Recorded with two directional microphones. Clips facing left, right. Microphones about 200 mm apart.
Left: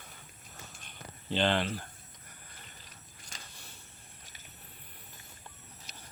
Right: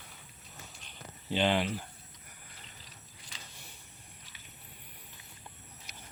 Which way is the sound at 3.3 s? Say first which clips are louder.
Left 1 dB; 45° left (ahead or behind).